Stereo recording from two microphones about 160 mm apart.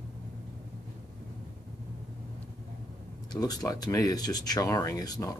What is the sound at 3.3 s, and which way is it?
Speech, 25° left (ahead or behind).